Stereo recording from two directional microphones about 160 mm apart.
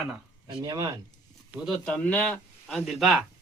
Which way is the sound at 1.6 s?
5° left (ahead or behind).